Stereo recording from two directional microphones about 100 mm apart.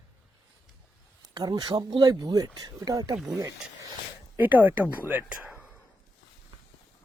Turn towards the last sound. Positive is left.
turn(degrees=-15)  # may be behind; listen again after turning